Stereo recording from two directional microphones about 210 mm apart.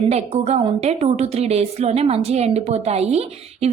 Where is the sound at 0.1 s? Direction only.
30° right (ahead or behind).